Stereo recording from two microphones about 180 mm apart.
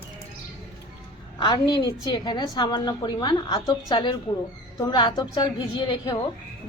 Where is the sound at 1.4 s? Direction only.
25° left (ahead or behind).